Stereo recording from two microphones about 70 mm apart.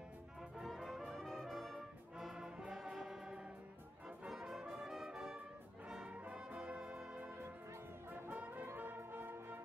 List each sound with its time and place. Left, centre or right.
0.4 s brass instrument: centre
2.7 s music: centre
4.3 s brass instrument: centre
8.1 s brass instrument: right
8.7 s music: right